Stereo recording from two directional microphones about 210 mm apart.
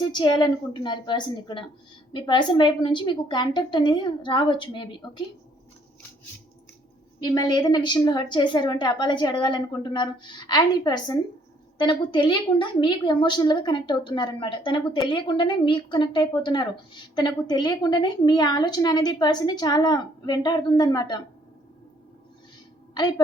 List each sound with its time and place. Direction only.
0.0 s a woman's voice: 20° left (ahead or behind)
7.2 s a woman's voice: 20° left (ahead or behind)
23.0 s a woman's voice: 20° left (ahead or behind)